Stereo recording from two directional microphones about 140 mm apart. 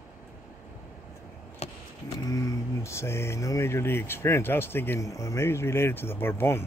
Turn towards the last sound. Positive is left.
turn(degrees=15)  # may be behind; listen again after turning